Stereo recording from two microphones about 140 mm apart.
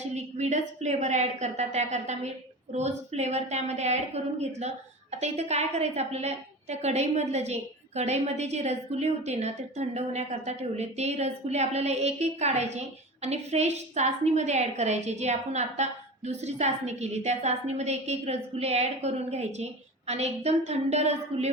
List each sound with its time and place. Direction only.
0.0 s a woman's voice: 55° right (ahead or behind)